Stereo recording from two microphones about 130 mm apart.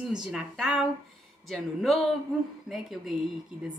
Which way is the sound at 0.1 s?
5° right (ahead or behind).